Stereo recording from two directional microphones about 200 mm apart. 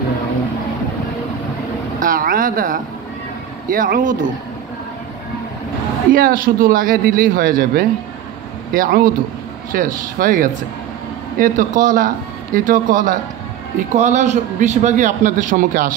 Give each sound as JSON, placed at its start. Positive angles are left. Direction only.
{"t": 2.0, "sound": "a man's voice", "side_deg": -45}
{"t": 6.1, "sound": "a man's voice", "side_deg": -45}